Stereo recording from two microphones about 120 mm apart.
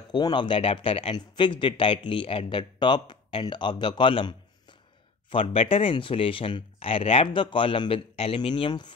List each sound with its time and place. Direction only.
0.1 s speech: 40° left (ahead or behind)
1.1 s speech: 40° left (ahead or behind)